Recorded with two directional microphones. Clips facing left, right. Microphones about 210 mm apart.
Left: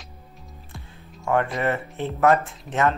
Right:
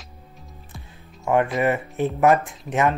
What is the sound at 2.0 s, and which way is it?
Speech, 15° right (ahead or behind).